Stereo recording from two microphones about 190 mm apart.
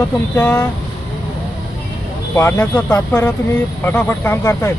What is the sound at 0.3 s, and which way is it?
Speech, 5° left (ahead or behind).